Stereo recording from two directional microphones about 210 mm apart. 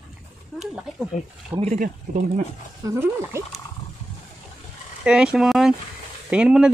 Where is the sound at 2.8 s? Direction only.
10° right (ahead or behind).